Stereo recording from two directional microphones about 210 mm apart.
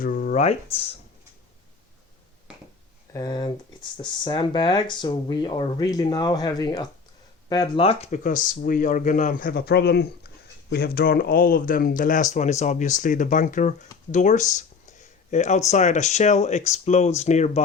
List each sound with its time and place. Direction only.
0.0 s speech: 40° left (ahead or behind)
3.1 s speech: 15° left (ahead or behind); by 17.6 s 35° left (ahead or behind)